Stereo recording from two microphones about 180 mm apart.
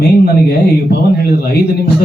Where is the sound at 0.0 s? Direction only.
60° left (ahead or behind).